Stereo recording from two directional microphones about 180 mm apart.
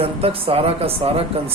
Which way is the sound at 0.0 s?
30° right (ahead or behind).